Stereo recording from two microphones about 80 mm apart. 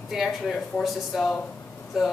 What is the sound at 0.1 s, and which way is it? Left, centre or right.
A woman's voice, centre.